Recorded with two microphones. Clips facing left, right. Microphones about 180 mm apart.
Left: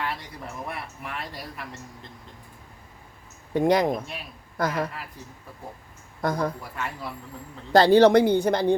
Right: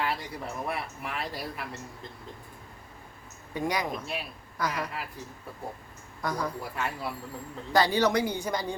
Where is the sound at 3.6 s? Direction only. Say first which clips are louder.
Left 9 dB; 55° left (ahead or behind).